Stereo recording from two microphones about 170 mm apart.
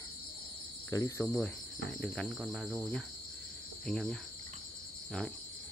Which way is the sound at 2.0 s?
5° left (ahead or behind).